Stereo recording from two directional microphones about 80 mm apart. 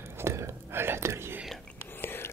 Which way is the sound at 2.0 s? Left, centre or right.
Left.